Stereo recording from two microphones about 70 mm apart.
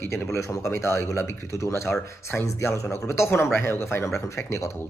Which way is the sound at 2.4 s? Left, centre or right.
Left.